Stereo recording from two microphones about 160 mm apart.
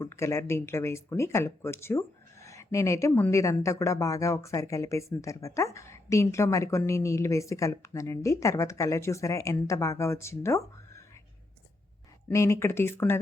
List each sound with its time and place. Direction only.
0.0 s speech: 15° left (ahead or behind)
12.3 s speech: 20° left (ahead or behind)